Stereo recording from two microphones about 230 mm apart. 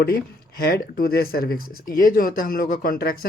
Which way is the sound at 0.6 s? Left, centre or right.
Left.